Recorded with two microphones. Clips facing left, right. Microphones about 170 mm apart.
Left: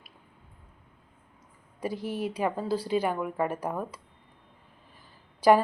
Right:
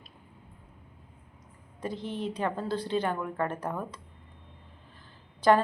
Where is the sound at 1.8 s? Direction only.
10° left (ahead or behind).